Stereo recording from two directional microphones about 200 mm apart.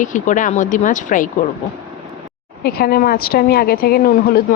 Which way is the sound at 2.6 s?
50° left (ahead or behind).